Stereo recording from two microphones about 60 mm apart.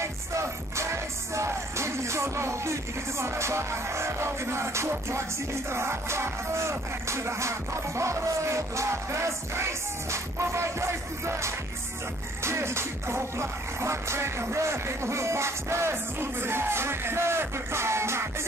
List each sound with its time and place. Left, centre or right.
0.0 s music: right